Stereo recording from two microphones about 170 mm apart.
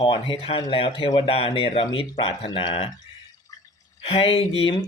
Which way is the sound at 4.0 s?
35° left (ahead or behind).